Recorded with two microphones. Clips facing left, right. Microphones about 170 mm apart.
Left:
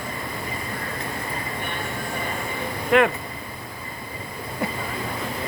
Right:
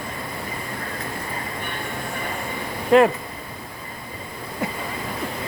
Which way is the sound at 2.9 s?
30° right (ahead or behind).